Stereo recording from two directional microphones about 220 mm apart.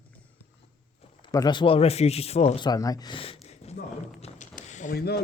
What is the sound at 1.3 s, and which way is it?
Speech, 20° left (ahead or behind).